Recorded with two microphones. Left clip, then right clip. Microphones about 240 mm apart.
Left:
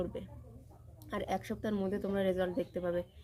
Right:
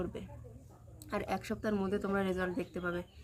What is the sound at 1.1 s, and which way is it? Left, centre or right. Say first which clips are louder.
Speech: even; centre.